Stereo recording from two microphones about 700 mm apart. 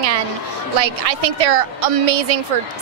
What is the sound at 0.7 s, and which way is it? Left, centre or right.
A woman's voice, right.